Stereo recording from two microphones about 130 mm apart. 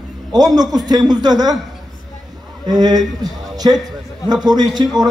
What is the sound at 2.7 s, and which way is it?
A man's voice, 30° right (ahead or behind).